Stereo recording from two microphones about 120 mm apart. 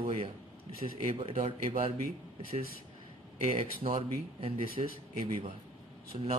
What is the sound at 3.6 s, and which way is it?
Speech, 50° right (ahead or behind).